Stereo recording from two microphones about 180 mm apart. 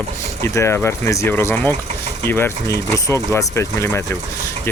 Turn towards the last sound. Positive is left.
turn(degrees=15)  # may be behind; listen again after turning